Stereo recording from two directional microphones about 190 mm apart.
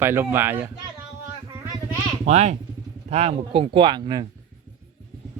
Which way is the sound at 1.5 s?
15° right (ahead or behind).